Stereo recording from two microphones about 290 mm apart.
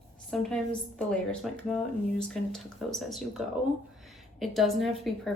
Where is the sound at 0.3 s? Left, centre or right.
Centre.